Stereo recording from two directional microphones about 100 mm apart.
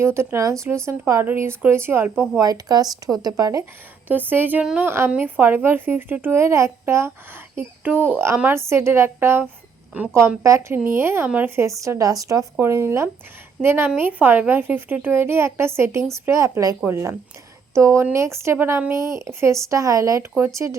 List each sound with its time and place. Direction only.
0.0 s speech: 25° right (ahead or behind)
2.4 s speech: 40° right (ahead or behind)
4.1 s a woman's voice: 20° right (ahead or behind)
4.9 s speech: 25° right (ahead or behind)
11.8 s speech: 35° right (ahead or behind)